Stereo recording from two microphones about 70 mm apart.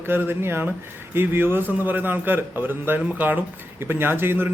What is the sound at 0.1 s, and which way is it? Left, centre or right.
A man's voice, right.